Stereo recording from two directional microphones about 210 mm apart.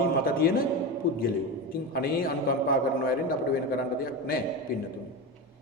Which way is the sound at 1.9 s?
45° left (ahead or behind).